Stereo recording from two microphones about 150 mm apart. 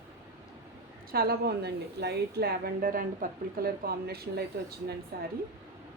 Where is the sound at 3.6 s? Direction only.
90° right.